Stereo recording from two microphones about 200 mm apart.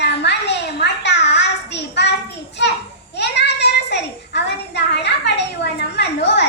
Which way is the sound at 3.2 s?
60° left (ahead or behind).